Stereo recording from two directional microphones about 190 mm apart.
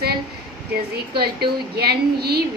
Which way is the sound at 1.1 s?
55° right (ahead or behind).